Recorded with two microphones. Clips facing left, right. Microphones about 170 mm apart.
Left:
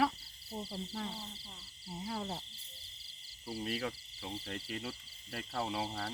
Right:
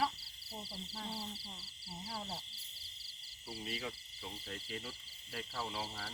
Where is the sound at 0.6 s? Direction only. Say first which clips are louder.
Left 7 dB; 55° left (ahead or behind).